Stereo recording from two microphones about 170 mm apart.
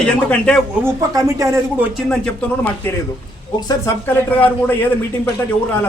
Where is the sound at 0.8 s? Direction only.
20° right (ahead or behind).